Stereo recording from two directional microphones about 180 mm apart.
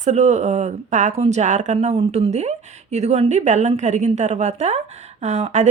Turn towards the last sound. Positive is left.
turn(degrees=-40)  # may be behind; listen again after turning